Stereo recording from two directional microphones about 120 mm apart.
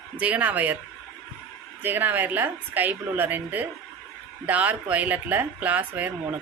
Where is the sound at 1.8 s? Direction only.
15° right (ahead or behind).